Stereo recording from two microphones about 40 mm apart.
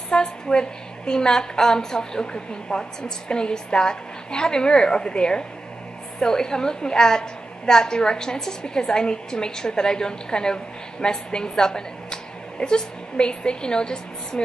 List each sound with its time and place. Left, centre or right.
0.1 s a woman's voice: centre